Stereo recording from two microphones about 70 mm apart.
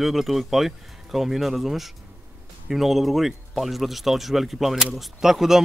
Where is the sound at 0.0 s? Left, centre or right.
Centre.